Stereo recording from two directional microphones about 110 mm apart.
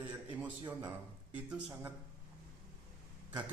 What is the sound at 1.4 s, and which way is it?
Speech, 10° right (ahead or behind).